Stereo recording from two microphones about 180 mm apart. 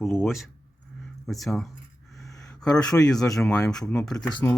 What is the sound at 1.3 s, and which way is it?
Speech, centre (ahead or behind).